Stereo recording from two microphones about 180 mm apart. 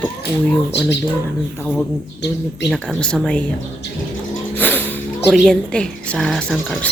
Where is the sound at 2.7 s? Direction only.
5° left (ahead or behind).